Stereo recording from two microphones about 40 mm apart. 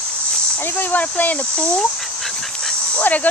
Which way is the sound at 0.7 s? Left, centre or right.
Left.